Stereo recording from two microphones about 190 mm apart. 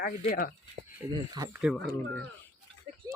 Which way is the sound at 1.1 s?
20° right (ahead or behind).